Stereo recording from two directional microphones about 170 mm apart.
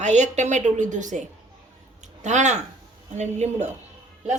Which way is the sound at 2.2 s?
45° right (ahead or behind).